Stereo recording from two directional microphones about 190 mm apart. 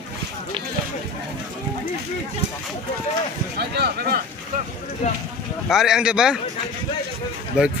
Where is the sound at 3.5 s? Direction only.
60° right (ahead or behind).